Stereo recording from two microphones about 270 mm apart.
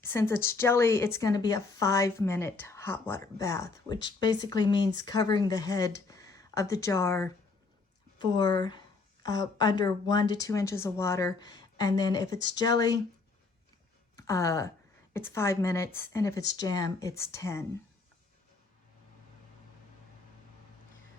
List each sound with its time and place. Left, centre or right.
0.0 s a woman's voice: centre
14.2 s a woman's voice: centre